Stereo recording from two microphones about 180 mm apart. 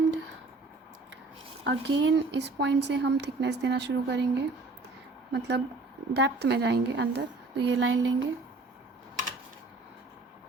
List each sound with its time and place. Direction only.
1.6 s a woman's voice: 70° right (ahead or behind); by 8.3 s 90° right